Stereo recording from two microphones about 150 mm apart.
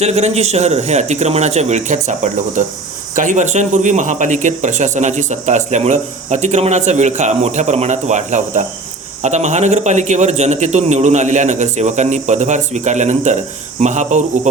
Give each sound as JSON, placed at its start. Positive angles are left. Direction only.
{"t": 0.0, "sound": "a man's voice", "side_deg": -50}